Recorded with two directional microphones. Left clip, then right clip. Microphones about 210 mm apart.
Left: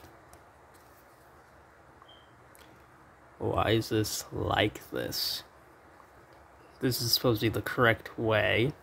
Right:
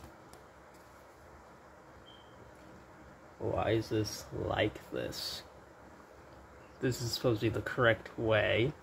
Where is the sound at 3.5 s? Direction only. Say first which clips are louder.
Left 4 dB; 35° left (ahead or behind).